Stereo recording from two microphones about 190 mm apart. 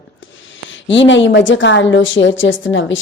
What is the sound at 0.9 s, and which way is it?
A woman's voice, 70° left (ahead or behind).